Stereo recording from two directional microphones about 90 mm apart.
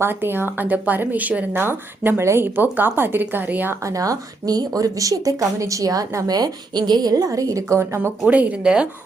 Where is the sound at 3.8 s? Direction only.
35° right (ahead or behind).